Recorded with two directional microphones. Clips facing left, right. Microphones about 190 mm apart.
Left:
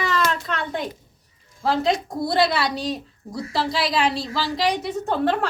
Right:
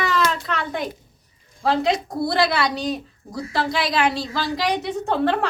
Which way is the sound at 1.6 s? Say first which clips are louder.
Right 1 dB; centre (ahead or behind).